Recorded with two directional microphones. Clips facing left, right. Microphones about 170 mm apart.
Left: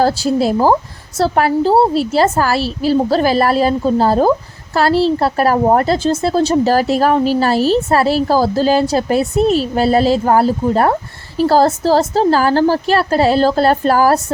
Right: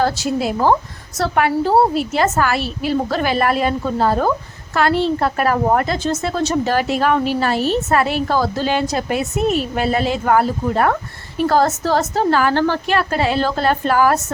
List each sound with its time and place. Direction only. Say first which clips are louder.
0.0 s a woman's voice: left 5 dB; 30° left (ahead or behind)